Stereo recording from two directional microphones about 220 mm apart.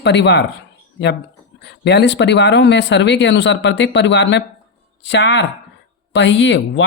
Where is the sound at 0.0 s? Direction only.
50° left (ahead or behind).